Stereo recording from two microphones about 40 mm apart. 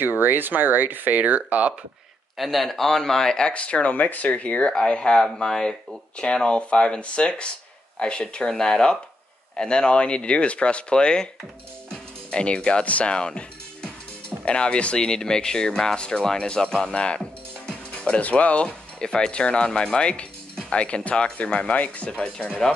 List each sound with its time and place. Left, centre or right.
0.2 s speech: right
2.3 s speech: centre
3.5 s speech: left
3.9 s speech: left
4.6 s speech: left
11.9 s music: left
12.8 s speech: left
13.1 s speech: left
16.9 s mechanisms: left
18.2 s speech: left